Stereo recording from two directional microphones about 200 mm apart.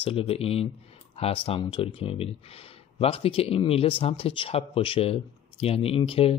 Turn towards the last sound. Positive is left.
turn(degrees=30)  # may be behind; listen again after turning